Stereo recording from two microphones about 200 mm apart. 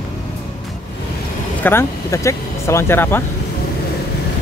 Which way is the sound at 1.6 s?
10° left (ahead or behind).